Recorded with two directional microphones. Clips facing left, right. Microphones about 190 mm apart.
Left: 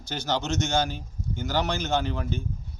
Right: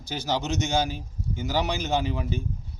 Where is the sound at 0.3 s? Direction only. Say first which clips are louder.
Even; centre (ahead or behind).